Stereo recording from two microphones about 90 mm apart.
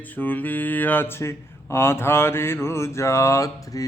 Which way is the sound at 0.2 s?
20° left (ahead or behind).